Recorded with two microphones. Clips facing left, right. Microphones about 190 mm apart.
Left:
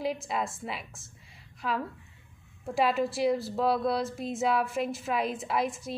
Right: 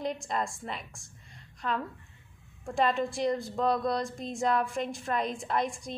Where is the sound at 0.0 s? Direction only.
5° left (ahead or behind).